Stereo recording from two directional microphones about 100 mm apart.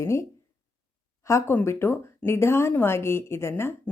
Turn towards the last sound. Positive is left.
turn(degrees=25)  # may be behind; listen again after turning